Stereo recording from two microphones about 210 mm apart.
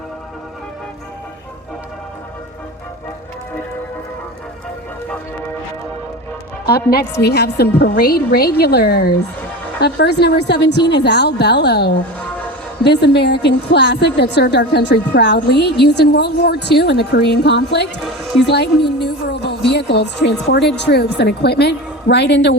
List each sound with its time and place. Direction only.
6.7 s a woman's voice: 45° left (ahead or behind)